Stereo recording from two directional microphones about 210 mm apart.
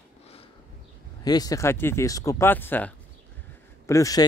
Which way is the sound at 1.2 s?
20° left (ahead or behind).